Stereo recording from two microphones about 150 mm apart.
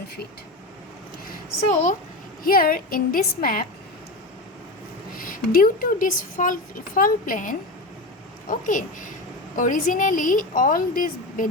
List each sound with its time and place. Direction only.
2.4 s a woman's voice: 75° left (ahead or behind)
5.1 s a woman's voice: 65° left (ahead or behind)